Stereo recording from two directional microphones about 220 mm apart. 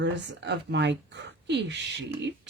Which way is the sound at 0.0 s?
50° right (ahead or behind).